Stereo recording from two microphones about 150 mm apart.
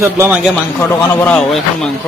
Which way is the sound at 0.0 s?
15° right (ahead or behind).